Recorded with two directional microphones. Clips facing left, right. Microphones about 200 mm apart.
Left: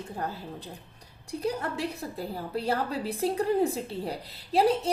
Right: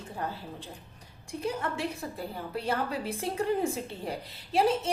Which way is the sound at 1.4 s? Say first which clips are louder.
Left 1 dB; 35° left (ahead or behind).